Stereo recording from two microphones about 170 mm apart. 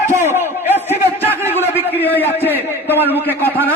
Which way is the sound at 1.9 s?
10° left (ahead or behind).